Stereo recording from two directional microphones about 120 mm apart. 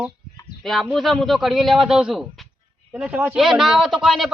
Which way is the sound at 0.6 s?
Centre (ahead or behind).